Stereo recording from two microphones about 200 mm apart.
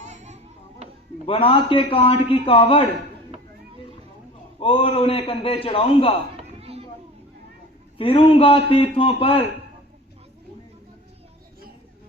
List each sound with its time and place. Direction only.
0.0 s children playing: 35° right (ahead or behind)
1.3 s a man's voice: 25° left (ahead or behind)
4.6 s a man's voice: 25° left (ahead or behind)
6.3 s a sound: 30° right (ahead or behind)
7.9 s a man's voice: 25° left (ahead or behind)